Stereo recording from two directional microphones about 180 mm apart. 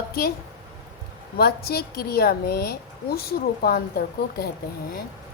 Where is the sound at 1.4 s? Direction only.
60° left (ahead or behind).